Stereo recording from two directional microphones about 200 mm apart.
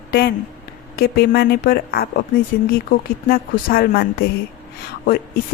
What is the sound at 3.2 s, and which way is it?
Speech, 45° left (ahead or behind).